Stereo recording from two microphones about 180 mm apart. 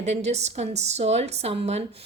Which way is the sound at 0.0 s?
40° right (ahead or behind).